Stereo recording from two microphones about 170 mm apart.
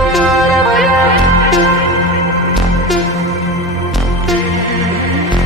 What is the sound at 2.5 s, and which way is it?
Music, centre (ahead or behind).